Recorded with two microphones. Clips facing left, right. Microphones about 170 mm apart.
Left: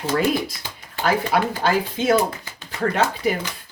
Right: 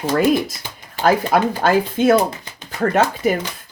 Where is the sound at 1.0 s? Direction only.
45° right (ahead or behind).